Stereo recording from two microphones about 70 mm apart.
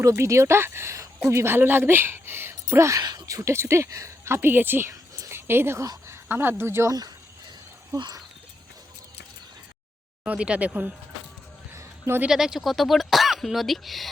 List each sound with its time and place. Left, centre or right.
0.2 s speech: right
0.9 s a woman's voice: right
3.0 s speech: right
3.5 s speech: right
4.4 s speech: right
4.9 s a sound: right
5.3 s speech: right
10.2 s speech: centre
11.7 s a sound: right
12.3 s speech: centre